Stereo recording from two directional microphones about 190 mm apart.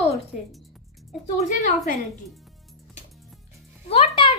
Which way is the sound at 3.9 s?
30° left (ahead or behind).